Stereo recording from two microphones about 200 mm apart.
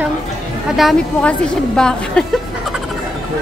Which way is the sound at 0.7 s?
5° left (ahead or behind).